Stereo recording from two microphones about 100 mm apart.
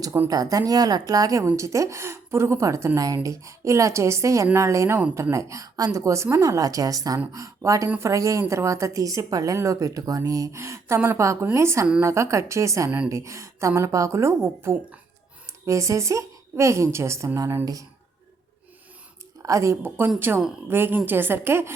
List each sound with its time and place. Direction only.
0.3 s a woman's voice: 40° right (ahead or behind)
19.4 s a woman's voice: 30° right (ahead or behind)